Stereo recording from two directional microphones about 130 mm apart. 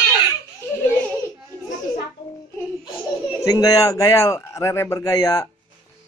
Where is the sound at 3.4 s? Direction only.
25° left (ahead or behind).